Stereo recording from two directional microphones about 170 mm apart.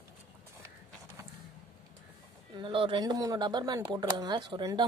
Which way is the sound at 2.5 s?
30° right (ahead or behind).